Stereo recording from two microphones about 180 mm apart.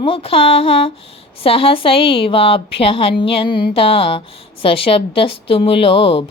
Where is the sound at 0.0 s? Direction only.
30° left (ahead or behind).